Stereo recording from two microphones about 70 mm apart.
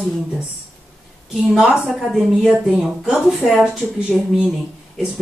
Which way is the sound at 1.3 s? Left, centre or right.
Centre.